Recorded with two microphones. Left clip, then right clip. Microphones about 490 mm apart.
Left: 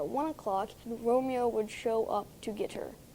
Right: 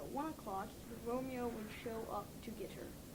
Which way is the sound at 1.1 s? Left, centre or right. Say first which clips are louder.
Left 14 dB; left.